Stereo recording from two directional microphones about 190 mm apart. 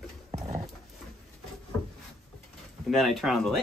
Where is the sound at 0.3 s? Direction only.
35° right (ahead or behind).